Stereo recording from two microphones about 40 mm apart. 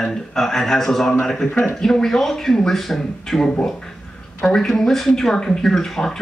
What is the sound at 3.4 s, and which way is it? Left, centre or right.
Speech, centre.